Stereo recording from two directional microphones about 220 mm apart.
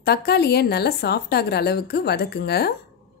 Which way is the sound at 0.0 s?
45° left (ahead or behind).